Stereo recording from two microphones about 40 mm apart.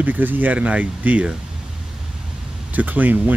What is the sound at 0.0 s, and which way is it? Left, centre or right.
Speech, right.